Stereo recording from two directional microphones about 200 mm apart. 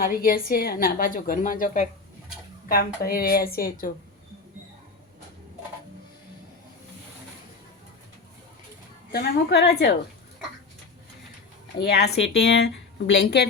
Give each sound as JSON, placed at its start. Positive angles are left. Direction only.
{"t": 0.0, "sound": "a woman's voice", "side_deg": 45}
{"t": 9.1, "sound": "speech", "side_deg": 50}
{"t": 11.9, "sound": "a woman's voice", "side_deg": 55}